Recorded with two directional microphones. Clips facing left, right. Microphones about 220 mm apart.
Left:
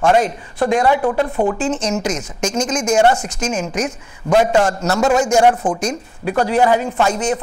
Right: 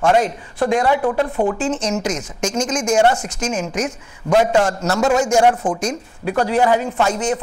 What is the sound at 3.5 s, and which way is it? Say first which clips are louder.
A man's voice: left 1 dB; 10° left (ahead or behind).